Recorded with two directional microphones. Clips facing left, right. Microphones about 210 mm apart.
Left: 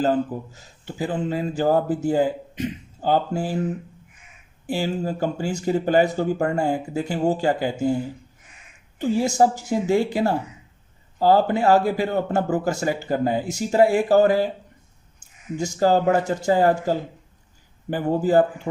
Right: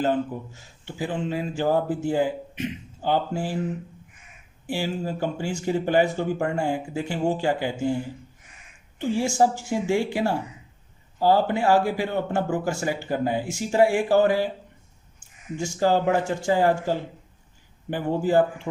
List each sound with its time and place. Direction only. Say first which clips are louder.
0.0 s speech: left 3 dB; 35° left (ahead or behind)
4.6 s speech: left 3 dB; 40° left (ahead or behind)
9.0 s speech: left 3 dB; 40° left (ahead or behind)
15.5 s speech: left 3 dB; 40° left (ahead or behind)